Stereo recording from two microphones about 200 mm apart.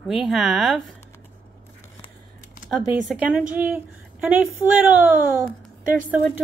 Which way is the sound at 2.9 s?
5° right (ahead or behind).